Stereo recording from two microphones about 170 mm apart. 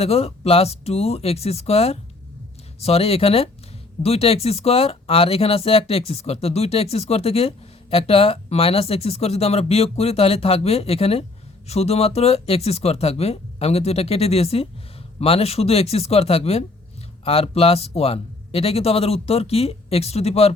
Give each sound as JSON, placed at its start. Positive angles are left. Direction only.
{"t": 0.0, "sound": "speech", "side_deg": 35}